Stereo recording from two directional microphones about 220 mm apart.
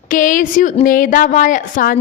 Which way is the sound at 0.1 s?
35° left (ahead or behind).